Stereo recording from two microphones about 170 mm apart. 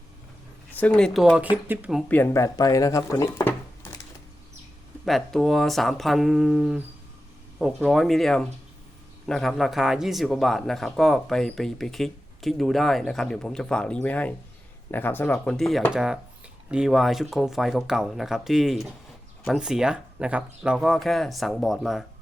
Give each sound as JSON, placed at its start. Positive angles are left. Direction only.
{"t": 0.8, "sound": "speech", "side_deg": 5}
{"t": 2.0, "sound": "speech", "side_deg": 10}
{"t": 5.0, "sound": "speech", "side_deg": 0}